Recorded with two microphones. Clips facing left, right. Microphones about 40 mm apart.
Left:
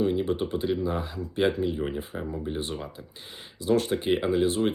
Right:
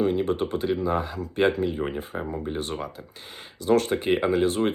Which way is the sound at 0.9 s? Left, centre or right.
Right.